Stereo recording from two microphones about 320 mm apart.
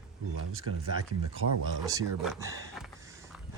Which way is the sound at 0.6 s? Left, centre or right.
Right.